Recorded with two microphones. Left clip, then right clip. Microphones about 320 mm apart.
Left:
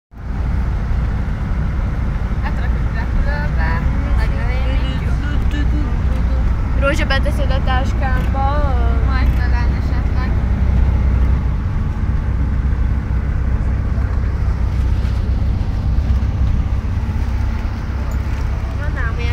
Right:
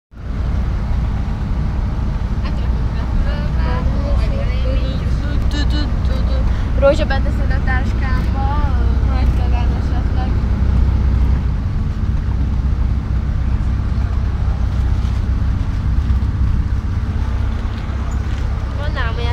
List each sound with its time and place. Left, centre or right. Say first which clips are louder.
6.8 s vehicle: right 4 dB; centre
7.5 s vehicle: left 1 dB; centre